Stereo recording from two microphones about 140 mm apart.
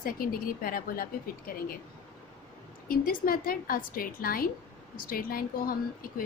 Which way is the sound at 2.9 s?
90° left.